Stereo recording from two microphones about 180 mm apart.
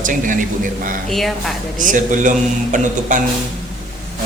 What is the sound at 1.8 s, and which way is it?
Speech, 45° right (ahead or behind).